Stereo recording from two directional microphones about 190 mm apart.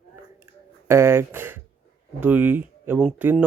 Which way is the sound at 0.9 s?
15° right (ahead or behind).